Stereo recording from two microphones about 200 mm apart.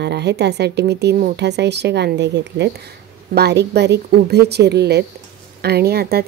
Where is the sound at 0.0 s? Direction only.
55° right (ahead or behind).